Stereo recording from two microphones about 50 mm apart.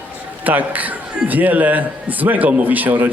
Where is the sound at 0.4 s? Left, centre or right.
Right.